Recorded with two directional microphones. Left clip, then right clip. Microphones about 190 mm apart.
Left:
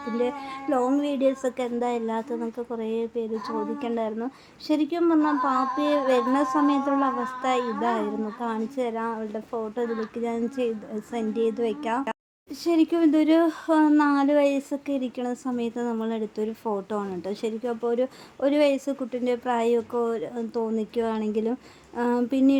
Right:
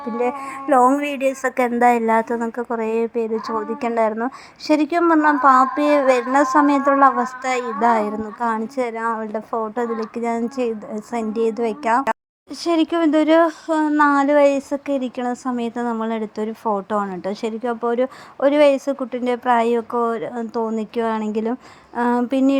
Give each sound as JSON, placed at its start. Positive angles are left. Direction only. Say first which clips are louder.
{"t": 0.7, "sound": "a woman's voice", "louder": "right 10 dB", "side_deg": -15}
{"t": 1.0, "sound": "a woman's voice", "louder": "right 4 dB", "side_deg": -35}